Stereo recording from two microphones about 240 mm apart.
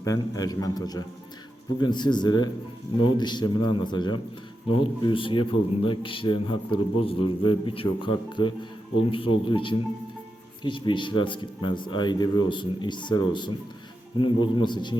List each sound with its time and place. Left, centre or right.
0.0 s a man's voice: centre